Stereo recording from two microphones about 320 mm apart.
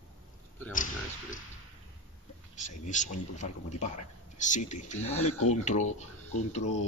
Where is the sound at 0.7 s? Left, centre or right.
Left.